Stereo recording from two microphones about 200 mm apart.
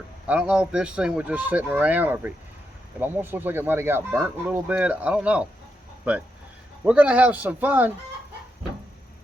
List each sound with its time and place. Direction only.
0.3 s speech: 5° right (ahead or behind)
6.8 s speech: 5° right (ahead or behind)